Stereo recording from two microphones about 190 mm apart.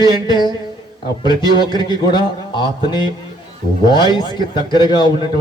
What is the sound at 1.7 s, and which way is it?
A man's voice, 25° left (ahead or behind).